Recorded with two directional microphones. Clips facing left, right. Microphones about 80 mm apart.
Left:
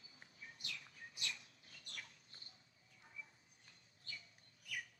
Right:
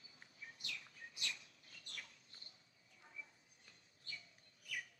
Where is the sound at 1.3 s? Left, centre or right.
Left.